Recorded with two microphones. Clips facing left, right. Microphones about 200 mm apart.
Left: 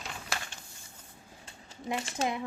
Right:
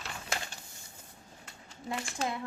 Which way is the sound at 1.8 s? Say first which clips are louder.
Left 3 dB; 20° left (ahead or behind).